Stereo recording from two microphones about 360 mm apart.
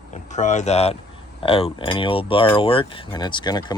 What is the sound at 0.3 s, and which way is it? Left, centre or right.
Speech, centre.